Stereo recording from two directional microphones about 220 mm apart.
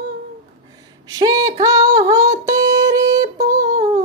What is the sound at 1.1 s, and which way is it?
Female singing, 15° right (ahead or behind).